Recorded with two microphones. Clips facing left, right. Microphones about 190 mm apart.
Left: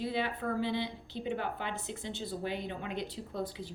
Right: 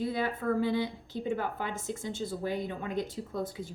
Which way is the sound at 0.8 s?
45° right (ahead or behind).